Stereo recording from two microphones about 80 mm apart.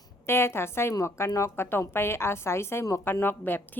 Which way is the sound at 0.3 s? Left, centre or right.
Left.